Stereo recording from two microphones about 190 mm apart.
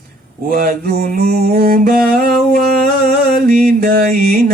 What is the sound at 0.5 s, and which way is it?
Mantra, 50° right (ahead or behind).